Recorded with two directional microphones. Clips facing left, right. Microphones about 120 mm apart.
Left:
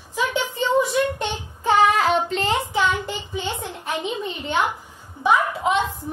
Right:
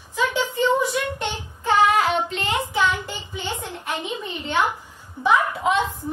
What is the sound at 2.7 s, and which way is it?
A woman's voice, 20° left (ahead or behind).